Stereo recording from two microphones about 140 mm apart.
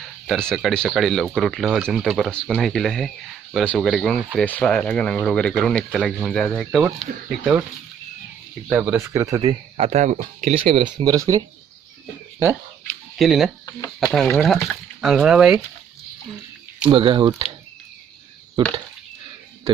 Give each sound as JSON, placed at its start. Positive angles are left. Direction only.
{"t": 0.0, "sound": "speech", "side_deg": 0}
{"t": 8.7, "sound": "speech", "side_deg": -15}
{"t": 9.4, "sound": "speech", "side_deg": -45}
{"t": 10.6, "sound": "speech", "side_deg": -40}
{"t": 13.1, "sound": "speech", "side_deg": 0}
{"t": 13.7, "sound": "speech", "side_deg": 25}
{"t": 14.3, "sound": "speech", "side_deg": 0}
{"t": 16.9, "sound": "speech", "side_deg": -35}
{"t": 18.6, "sound": "speech", "side_deg": -35}